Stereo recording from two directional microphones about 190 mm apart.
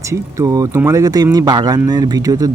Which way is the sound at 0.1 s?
15° right (ahead or behind).